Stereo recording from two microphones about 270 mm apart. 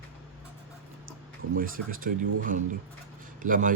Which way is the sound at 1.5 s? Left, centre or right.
Right.